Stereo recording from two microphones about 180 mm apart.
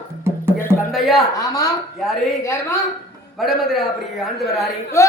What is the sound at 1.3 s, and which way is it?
A man's voice, 20° left (ahead or behind).